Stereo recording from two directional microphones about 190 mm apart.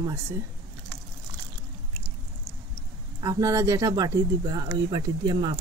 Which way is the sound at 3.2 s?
15° right (ahead or behind).